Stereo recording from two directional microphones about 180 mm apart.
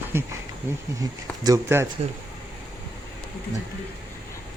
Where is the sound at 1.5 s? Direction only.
15° right (ahead or behind).